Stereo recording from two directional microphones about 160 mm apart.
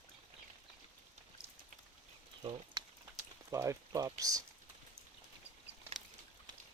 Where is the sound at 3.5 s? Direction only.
20° right (ahead or behind).